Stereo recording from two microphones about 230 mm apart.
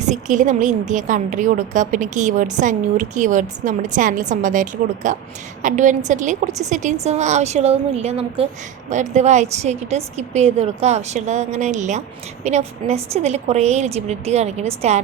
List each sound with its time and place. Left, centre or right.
0.0 s a woman's voice: right